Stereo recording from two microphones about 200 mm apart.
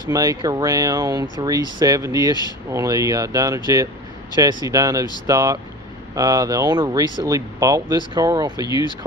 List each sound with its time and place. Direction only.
0.1 s speech: 20° right (ahead or behind)